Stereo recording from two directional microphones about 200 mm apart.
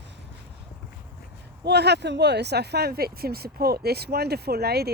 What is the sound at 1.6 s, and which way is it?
Speech, 55° right (ahead or behind).